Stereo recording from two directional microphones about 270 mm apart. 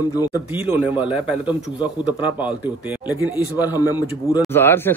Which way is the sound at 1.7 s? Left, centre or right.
Centre.